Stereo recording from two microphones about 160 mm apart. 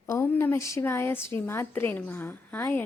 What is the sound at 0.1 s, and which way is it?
A woman's voice, 15° left (ahead or behind).